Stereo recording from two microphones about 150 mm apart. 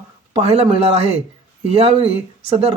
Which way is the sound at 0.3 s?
40° right (ahead or behind).